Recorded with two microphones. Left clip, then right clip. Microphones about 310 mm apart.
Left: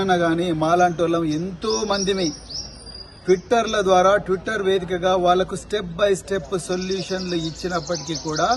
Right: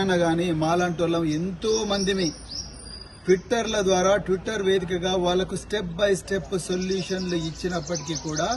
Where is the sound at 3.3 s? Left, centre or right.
Centre.